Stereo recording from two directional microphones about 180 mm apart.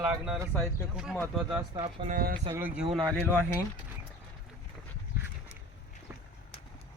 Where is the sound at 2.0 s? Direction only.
50° right (ahead or behind).